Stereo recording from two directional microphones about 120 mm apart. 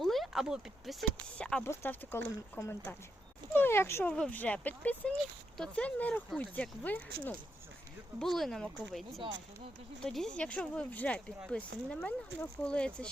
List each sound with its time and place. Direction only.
0.0 s speech: centre (ahead or behind)
1.4 s speech: 10° left (ahead or behind)
1.6 s speech: 20° left (ahead or behind)
4.1 s speech: 10° left (ahead or behind)
8.2 s speech: 5° left (ahead or behind)